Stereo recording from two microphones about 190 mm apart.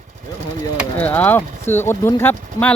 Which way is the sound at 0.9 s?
10° left (ahead or behind).